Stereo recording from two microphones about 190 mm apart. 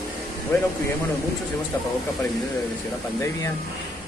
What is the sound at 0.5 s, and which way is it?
Speech, 15° left (ahead or behind).